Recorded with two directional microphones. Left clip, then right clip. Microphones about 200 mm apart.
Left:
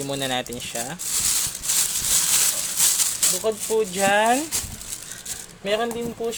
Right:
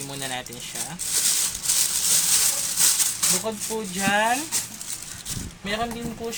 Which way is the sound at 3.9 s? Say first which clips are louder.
Left 2 dB; 45° left (ahead or behind).